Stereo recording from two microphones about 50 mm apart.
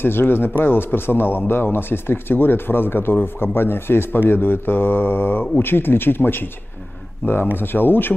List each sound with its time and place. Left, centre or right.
0.0 s speech: left
7.5 s speech: left